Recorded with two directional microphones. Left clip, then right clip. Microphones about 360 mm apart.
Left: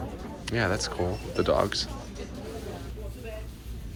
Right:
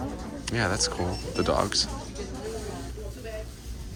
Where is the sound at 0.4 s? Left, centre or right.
Centre.